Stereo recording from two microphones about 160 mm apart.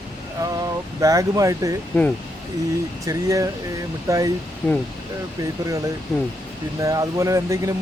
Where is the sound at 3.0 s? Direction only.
20° right (ahead or behind).